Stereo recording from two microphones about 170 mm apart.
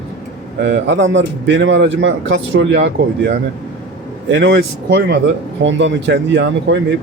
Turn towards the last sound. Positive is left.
turn(degrees=-90)